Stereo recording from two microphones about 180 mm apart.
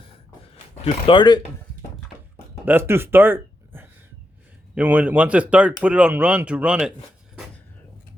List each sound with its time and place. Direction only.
0.9 s speech: 25° left (ahead or behind)
2.6 s speech: 10° right (ahead or behind)